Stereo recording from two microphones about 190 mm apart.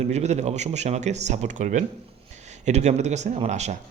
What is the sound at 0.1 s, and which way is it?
A man's voice, 35° right (ahead or behind).